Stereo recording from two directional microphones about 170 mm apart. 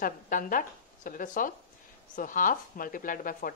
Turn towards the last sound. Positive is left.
turn(degrees=55)  # may be behind; listen again after turning